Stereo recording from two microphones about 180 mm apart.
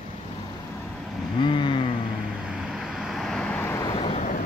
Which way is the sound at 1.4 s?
25° left (ahead or behind).